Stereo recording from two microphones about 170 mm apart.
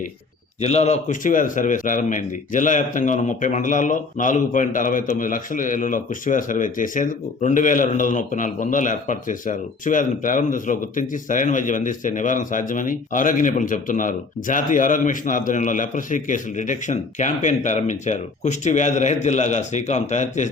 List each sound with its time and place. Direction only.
0.6 s speech: 40° left (ahead or behind)